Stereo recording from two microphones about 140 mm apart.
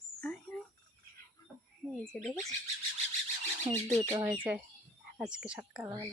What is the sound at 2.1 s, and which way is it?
Speech, 10° left (ahead or behind).